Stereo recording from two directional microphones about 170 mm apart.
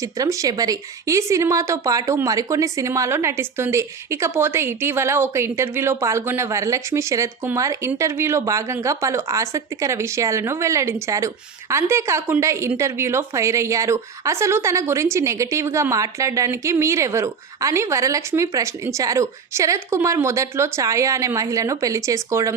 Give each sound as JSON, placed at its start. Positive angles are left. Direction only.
{"t": 0.0, "sound": "a woman's voice", "side_deg": -20}